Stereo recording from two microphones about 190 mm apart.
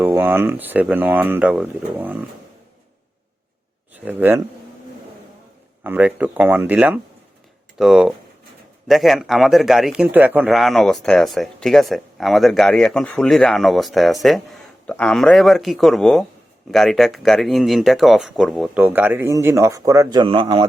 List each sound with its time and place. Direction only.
0.0 s speech: 10° right (ahead or behind)
4.0 s speech: 10° right (ahead or behind)
5.8 s speech: 10° right (ahead or behind); by 20.7 s 25° right (ahead or behind)